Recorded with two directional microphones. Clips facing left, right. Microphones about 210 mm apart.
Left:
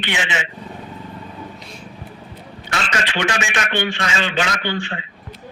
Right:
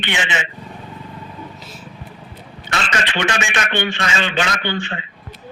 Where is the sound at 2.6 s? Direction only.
5° left (ahead or behind).